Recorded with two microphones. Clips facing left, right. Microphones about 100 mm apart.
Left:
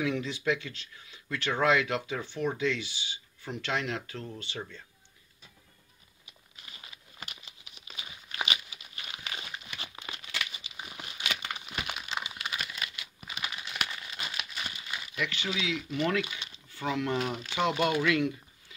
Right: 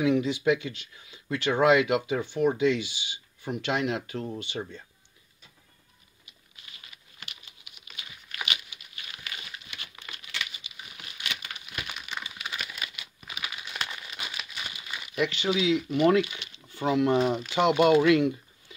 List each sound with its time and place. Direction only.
0.0 s speech: 20° right (ahead or behind)
6.9 s crumpling: 30° left (ahead or behind)
9.2 s a sound: 30° left (ahead or behind)
9.8 s crumpling: 25° left (ahead or behind)
12.4 s crumpling: centre (ahead or behind)
14.2 s crumpling: 5° left (ahead or behind)
15.1 s speech: 25° right (ahead or behind)